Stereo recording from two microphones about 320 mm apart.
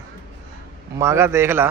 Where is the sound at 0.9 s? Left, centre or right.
Centre.